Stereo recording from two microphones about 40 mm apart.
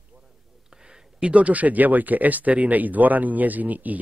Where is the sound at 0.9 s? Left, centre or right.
Right.